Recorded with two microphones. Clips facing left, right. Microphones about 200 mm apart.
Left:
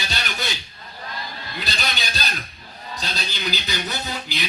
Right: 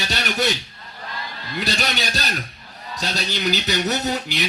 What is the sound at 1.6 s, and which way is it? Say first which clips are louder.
Speech: right 5 dB; 75° right (ahead or behind).